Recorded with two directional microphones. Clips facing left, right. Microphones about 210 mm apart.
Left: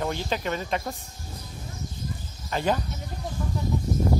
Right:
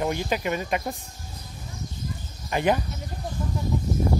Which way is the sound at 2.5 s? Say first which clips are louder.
Right 3 dB; 15° right (ahead or behind).